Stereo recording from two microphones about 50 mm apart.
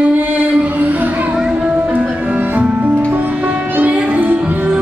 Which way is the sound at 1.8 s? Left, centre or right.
Right.